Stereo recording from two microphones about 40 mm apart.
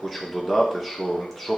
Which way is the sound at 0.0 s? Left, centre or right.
Centre.